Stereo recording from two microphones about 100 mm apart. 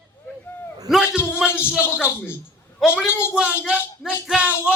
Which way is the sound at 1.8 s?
25° left (ahead or behind).